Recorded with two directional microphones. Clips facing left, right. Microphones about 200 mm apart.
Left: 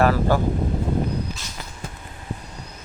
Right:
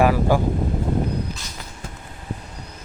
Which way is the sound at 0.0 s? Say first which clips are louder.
Right 1 dB; 10° right (ahead or behind).